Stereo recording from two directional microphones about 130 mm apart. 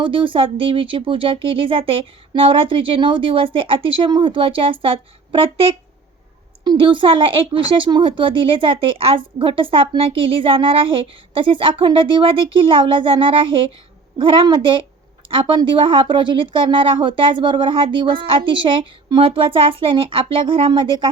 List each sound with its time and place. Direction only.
0.0 s a woman's voice: 40° right (ahead or behind)